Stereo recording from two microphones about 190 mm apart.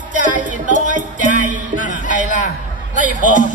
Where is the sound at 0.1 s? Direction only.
40° right (ahead or behind).